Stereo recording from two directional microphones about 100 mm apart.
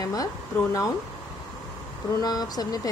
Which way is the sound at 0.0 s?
35° left (ahead or behind).